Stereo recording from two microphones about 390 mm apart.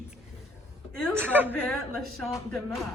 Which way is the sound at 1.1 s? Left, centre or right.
Centre.